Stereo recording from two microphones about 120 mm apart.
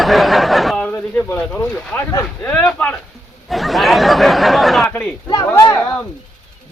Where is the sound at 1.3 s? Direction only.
10° left (ahead or behind).